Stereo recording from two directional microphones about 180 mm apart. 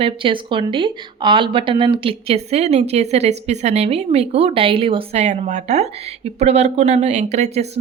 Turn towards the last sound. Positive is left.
turn(degrees=-35)  # may be behind; listen again after turning